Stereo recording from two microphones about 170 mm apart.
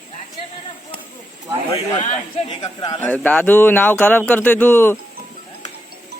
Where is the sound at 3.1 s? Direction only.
10° left (ahead or behind).